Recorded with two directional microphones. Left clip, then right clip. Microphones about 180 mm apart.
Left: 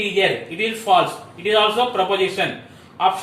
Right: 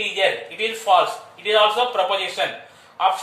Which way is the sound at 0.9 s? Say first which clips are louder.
Left 1 dB; 25° right (ahead or behind).